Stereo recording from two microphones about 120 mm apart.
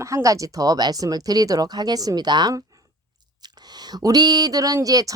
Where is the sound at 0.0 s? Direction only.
25° right (ahead or behind).